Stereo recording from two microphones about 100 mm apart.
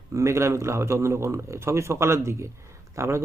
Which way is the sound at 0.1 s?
30° right (ahead or behind).